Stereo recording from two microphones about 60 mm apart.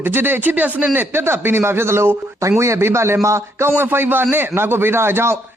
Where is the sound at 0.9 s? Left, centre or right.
Right.